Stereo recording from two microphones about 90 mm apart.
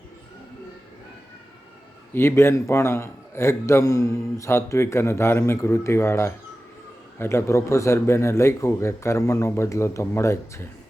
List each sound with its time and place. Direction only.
2.1 s a man's voice: 30° left (ahead or behind)